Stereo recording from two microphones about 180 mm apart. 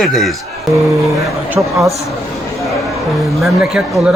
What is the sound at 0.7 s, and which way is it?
Music, 15° right (ahead or behind).